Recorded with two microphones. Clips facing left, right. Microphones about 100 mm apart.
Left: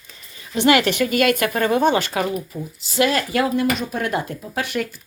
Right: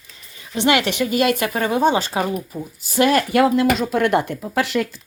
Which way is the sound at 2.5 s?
50° right (ahead or behind).